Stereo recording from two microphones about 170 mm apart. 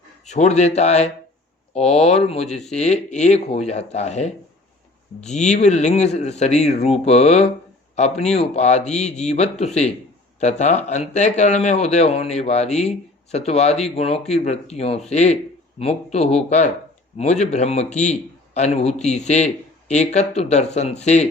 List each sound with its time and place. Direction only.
0.3 s speech: 40° left (ahead or behind)
5.3 s speech: 40° left (ahead or behind)